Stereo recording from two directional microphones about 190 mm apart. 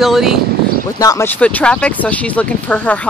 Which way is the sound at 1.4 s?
5° left (ahead or behind).